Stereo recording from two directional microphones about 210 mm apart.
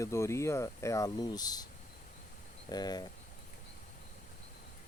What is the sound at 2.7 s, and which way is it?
Speech, 20° left (ahead or behind).